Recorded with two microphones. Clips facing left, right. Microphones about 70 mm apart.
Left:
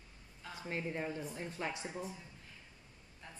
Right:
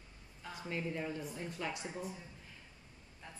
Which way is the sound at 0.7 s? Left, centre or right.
Left.